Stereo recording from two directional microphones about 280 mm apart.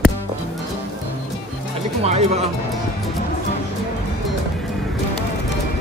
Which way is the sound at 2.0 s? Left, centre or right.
Right.